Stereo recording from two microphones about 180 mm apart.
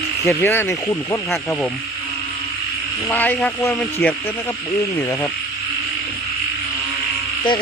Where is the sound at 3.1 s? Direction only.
10° left (ahead or behind).